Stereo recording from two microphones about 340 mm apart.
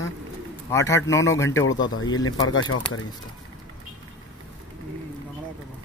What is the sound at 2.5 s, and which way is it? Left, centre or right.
Speech, left.